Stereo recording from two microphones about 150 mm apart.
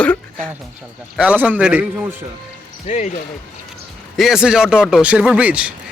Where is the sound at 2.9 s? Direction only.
55° left (ahead or behind).